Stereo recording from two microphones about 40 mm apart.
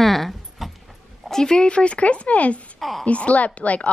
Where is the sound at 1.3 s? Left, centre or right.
Centre.